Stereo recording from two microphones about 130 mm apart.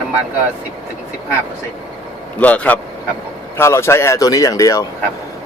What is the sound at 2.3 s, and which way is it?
A man's voice, 10° left (ahead or behind).